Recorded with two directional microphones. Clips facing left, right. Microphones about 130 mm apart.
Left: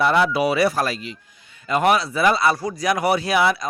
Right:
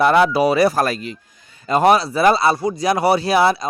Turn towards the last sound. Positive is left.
turn(degrees=-35)  # may be behind; listen again after turning